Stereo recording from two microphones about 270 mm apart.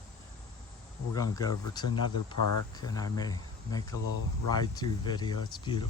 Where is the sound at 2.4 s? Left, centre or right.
Left.